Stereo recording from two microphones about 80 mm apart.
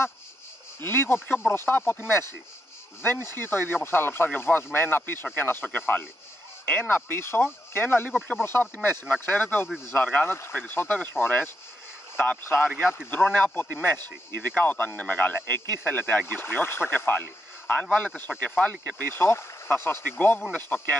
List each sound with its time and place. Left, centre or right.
0.7 s speech: left
10.2 s speech: left
19.2 s speech: left